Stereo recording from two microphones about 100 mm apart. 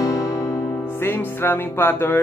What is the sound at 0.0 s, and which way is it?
Music, 35° left (ahead or behind).